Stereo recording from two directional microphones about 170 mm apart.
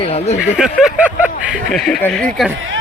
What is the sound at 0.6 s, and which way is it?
Speech, 5° right (ahead or behind).